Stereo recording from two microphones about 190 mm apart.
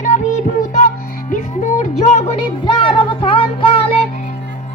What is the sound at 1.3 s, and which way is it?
Music, 40° left (ahead or behind).